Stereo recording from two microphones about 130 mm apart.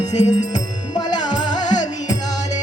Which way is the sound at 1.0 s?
35° left (ahead or behind).